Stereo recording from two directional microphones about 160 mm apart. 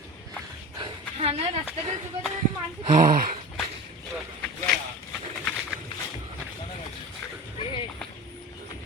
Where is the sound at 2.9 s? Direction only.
60° right (ahead or behind).